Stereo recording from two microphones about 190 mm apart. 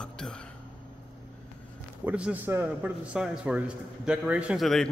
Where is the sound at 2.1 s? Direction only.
5° right (ahead or behind).